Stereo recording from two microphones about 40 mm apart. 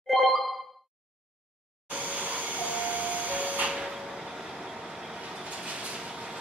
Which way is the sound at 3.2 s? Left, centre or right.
Right.